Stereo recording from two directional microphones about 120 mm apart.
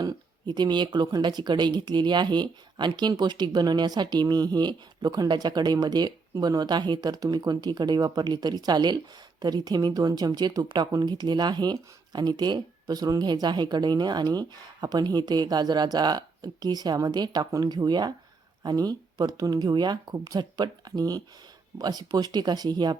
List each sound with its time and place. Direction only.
0.0 s speech: 35° right (ahead or behind)